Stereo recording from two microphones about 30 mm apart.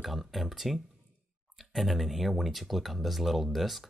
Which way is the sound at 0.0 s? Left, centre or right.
Centre.